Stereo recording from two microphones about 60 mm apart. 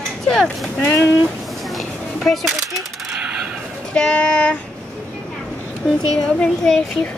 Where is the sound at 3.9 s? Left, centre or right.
Centre.